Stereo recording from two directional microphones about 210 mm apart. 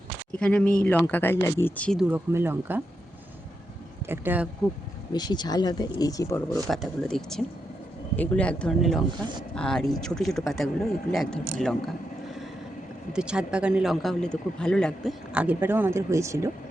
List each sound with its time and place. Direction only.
0.3 s speech: 5° left (ahead or behind)
2.0 s speech: 10° right (ahead or behind)
4.0 s speech: 10° right (ahead or behind)
5.1 s speech: 20° left (ahead or behind)
6.7 s a man's voice: centre (ahead or behind)
13.1 s a man's voice: 5° right (ahead or behind)